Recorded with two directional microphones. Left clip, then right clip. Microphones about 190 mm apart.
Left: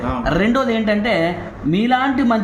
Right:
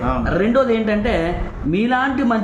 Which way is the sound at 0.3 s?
50° left (ahead or behind).